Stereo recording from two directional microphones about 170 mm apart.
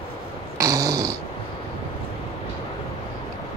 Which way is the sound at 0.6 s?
20° right (ahead or behind).